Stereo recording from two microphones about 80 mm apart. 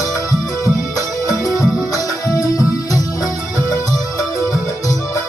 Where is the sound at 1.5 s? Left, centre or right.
Left.